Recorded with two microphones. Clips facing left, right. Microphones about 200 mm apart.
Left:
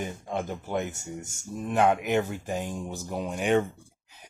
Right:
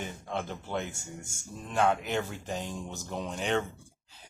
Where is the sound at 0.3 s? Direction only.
10° left (ahead or behind).